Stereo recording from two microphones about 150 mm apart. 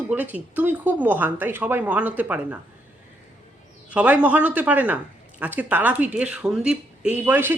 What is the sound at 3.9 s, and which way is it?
Speech, 10° right (ahead or behind).